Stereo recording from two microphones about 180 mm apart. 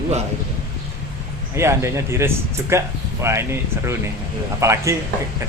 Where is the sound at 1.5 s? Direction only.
15° right (ahead or behind).